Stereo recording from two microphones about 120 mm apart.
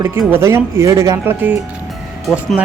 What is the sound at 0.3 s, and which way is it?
Speech, 20° right (ahead or behind).